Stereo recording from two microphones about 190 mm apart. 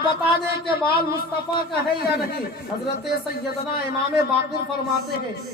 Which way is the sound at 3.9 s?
55° left (ahead or behind).